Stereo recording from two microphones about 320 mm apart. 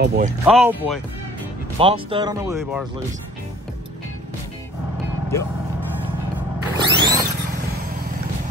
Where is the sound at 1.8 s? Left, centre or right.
Centre.